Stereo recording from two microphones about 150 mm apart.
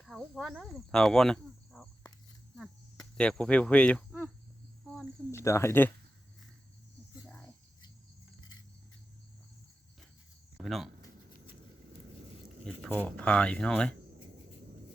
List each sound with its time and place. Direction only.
0.0 s speech: centre (ahead or behind)
2.6 s cricket: 5° left (ahead or behind)
5.3 s speech: 20° left (ahead or behind)
7.3 s cricket: 10° left (ahead or behind)
10.6 s speech: centre (ahead or behind)
12.6 s speech: 10° left (ahead or behind)